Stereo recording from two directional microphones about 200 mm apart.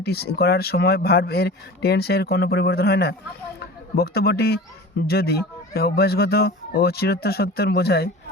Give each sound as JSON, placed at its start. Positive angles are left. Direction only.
{"t": 0.0, "sound": "a man's voice", "side_deg": 55}